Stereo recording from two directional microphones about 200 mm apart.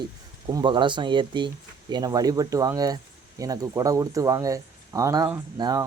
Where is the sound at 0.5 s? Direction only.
25° right (ahead or behind).